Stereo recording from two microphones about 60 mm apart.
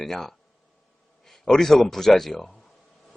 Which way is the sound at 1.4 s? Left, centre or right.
Centre.